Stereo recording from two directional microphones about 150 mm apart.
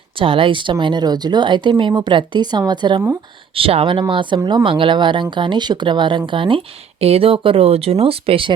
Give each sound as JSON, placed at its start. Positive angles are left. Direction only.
{"t": 0.2, "sound": "speech", "side_deg": -35}